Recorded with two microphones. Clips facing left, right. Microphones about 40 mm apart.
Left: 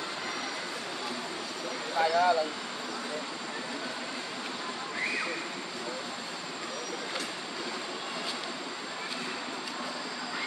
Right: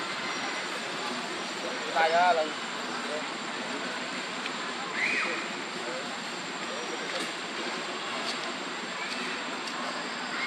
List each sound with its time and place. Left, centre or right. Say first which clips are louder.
2.0 s speech: right 2 dB; right